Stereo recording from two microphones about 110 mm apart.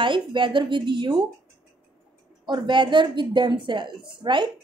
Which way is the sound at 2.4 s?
45° right (ahead or behind).